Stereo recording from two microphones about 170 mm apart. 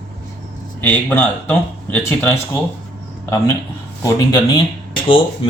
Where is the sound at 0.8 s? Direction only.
10° left (ahead or behind).